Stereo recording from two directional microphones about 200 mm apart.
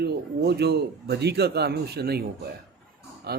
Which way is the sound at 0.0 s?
55° right (ahead or behind).